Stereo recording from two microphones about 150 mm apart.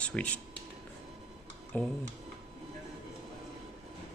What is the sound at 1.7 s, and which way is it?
Speech, 10° left (ahead or behind).